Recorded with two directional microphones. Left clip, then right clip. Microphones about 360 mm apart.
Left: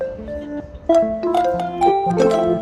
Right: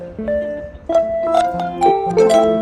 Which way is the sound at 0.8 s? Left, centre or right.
Centre.